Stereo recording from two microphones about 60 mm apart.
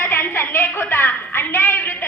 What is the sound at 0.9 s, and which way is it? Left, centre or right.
Music, left.